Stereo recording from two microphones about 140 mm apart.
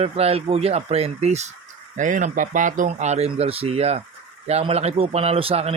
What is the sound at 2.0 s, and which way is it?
A man's voice, 65° right (ahead or behind).